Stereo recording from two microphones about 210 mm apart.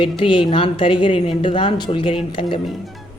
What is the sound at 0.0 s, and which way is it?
A woman's voice, 25° left (ahead or behind).